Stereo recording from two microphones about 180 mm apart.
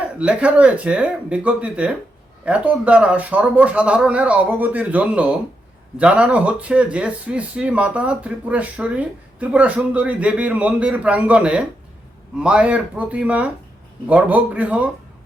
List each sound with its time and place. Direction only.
0.0 s speech: 5° right (ahead or behind)